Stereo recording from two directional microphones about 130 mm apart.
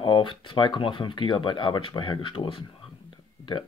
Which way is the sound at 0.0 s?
40° left (ahead or behind).